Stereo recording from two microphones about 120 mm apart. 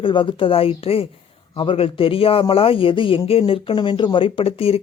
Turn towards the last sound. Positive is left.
turn(degrees=55)  # may be behind; listen again after turning